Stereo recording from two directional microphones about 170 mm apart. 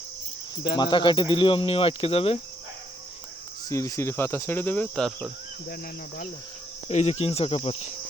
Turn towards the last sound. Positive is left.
turn(degrees=35)  # may be behind; listen again after turning